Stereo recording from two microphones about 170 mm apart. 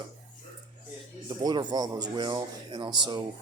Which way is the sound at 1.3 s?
25° right (ahead or behind).